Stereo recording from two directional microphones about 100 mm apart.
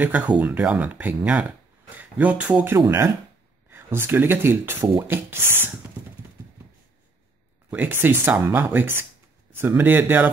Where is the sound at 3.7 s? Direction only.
20° right (ahead or behind).